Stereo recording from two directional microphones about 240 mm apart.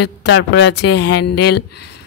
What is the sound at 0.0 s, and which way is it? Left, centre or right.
Speech, left.